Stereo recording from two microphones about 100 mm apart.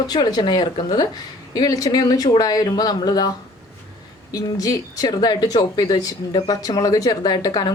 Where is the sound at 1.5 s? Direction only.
35° left (ahead or behind).